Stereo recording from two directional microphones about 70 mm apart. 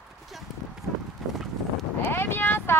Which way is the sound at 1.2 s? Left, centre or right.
Centre.